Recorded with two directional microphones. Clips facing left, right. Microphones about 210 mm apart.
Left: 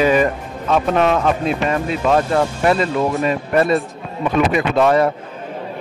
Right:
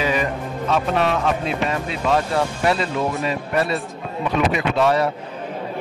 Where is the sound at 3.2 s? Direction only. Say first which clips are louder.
Left 5 dB; 50° left (ahead or behind).